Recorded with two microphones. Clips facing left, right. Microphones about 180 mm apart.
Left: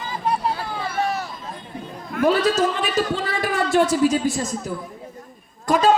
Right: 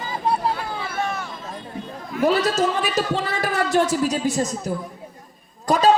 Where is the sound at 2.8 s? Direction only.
40° right (ahead or behind).